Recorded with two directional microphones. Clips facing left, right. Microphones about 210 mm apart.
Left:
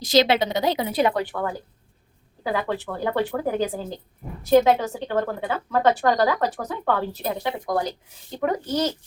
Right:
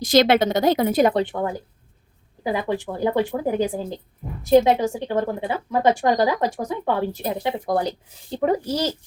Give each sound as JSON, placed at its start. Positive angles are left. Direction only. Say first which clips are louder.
{"t": 0.0, "sound": "a woman's voice", "louder": "right 3 dB", "side_deg": -50}
{"t": 1.1, "sound": "a child's voice", "louder": "right 3 dB", "side_deg": -20}
{"t": 7.7, "sound": "a child's voice", "louder": "right 2 dB", "side_deg": -30}